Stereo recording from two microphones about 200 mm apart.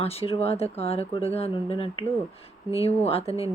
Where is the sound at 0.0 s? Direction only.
30° left (ahead or behind).